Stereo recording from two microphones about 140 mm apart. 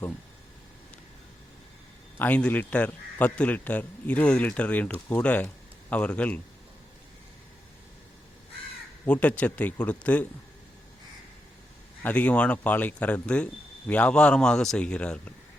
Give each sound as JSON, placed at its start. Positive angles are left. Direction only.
{"t": 2.1, "sound": "speech", "side_deg": 10}
{"t": 9.2, "sound": "speech", "side_deg": 10}
{"t": 12.0, "sound": "speech", "side_deg": 10}